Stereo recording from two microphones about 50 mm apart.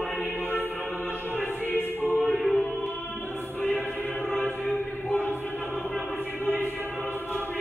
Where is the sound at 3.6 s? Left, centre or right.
Left.